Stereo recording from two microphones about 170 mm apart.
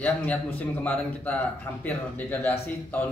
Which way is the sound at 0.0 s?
10° left (ahead or behind).